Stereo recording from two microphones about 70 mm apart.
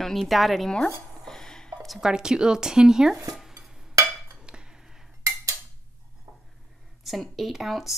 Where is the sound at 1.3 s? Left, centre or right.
Centre.